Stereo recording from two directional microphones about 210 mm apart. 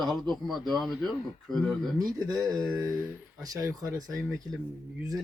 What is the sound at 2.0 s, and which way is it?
Speech, 15° right (ahead or behind).